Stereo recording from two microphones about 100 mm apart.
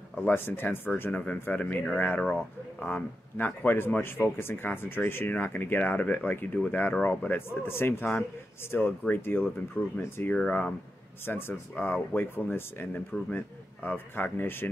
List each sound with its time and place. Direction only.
0.2 s speech: 20° left (ahead or behind)